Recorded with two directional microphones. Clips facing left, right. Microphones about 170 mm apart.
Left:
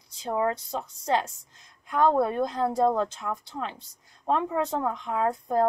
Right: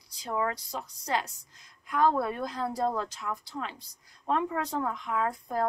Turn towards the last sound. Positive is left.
turn(degrees=25)  # may be behind; listen again after turning